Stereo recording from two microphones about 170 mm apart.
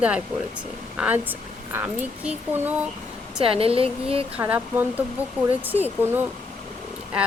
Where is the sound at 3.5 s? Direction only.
35° right (ahead or behind).